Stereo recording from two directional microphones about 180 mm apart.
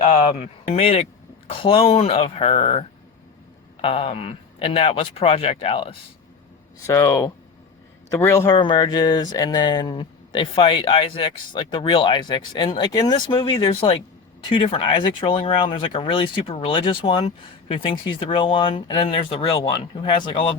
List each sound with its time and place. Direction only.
0.0 s speech: 35° left (ahead or behind)
6.8 s speech: 15° left (ahead or behind)